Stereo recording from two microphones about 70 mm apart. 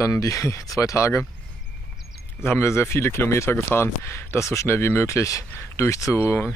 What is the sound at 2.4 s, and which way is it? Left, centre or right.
Speech, left.